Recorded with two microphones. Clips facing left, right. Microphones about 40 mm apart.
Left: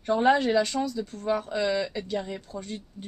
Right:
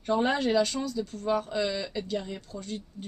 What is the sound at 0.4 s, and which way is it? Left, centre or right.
Speech, left.